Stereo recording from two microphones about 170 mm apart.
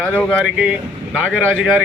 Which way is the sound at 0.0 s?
5° left (ahead or behind).